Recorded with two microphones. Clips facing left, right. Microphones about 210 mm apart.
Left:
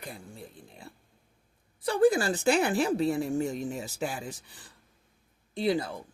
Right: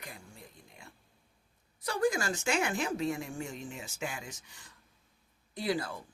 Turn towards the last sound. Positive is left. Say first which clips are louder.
# left 5 dB
turn(degrees=25)  # may be behind; listen again after turning